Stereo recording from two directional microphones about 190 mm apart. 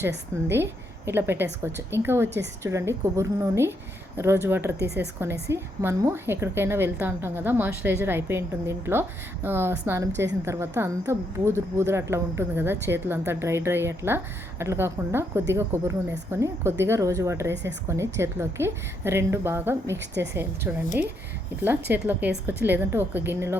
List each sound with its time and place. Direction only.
0.4 s a woman's voice: 10° right (ahead or behind)
17.5 s speech: 65° right (ahead or behind)
17.8 s a woman's voice: 15° right (ahead or behind)